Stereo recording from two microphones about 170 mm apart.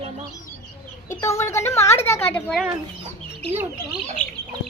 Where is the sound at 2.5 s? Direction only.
5° right (ahead or behind).